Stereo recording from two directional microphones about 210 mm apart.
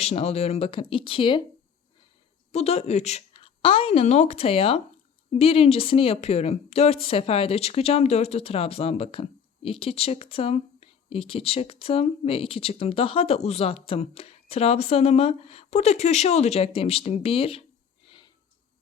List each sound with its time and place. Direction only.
0.0 s speech: 30° left (ahead or behind)
2.5 s a woman's voice: 30° left (ahead or behind)